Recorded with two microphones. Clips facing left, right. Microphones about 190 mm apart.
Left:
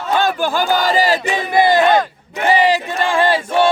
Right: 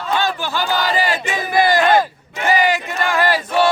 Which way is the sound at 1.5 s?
20° left (ahead or behind).